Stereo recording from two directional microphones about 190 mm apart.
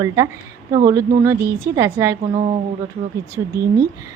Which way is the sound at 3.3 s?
15° right (ahead or behind).